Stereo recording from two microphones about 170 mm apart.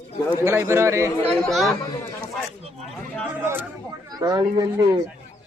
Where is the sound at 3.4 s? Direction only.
15° right (ahead or behind).